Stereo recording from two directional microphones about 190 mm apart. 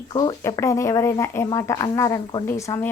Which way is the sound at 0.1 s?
25° left (ahead or behind).